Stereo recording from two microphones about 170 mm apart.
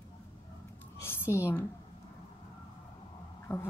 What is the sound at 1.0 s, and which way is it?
Speech, 15° left (ahead or behind).